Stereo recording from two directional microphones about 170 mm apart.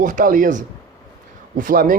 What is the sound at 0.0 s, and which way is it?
A man's voice, 50° right (ahead or behind).